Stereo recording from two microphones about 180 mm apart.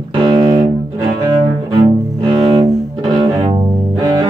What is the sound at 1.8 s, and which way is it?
Cello, 30° right (ahead or behind).